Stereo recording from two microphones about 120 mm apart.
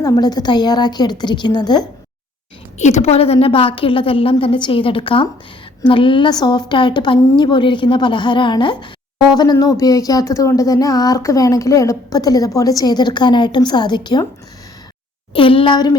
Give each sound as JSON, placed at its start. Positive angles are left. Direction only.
{"t": 0.0, "sound": "speech", "side_deg": 30}
{"t": 2.7, "sound": "a woman's voice", "side_deg": 70}
{"t": 15.3, "sound": "a woman's voice", "side_deg": 45}